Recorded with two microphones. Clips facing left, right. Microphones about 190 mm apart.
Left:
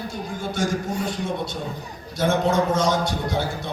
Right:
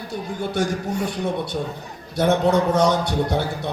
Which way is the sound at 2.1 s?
65° right (ahead or behind).